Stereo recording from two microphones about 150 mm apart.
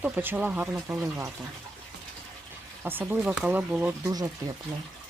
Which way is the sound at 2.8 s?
15° right (ahead or behind).